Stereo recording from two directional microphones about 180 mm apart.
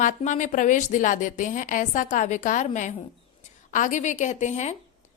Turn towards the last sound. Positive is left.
turn(degrees=40)  # may be behind; listen again after turning